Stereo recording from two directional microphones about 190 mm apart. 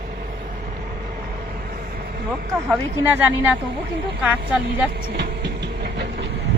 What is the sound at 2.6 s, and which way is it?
Speech, 10° right (ahead or behind).